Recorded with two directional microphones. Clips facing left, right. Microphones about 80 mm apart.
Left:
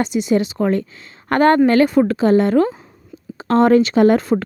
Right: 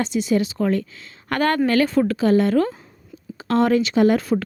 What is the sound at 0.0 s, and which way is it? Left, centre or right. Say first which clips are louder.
Speech: left 3 dB; left.